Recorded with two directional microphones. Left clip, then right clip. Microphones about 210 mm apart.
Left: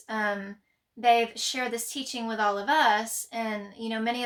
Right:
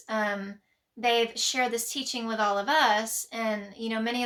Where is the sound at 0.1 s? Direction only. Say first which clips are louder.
Even; 15° right (ahead or behind).